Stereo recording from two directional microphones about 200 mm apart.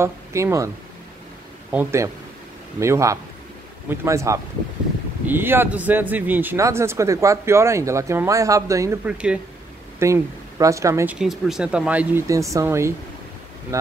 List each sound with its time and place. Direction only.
0.0 s speech: 15° right (ahead or behind)
1.7 s a man's voice: 10° right (ahead or behind)
11.1 s a man's voice: centre (ahead or behind)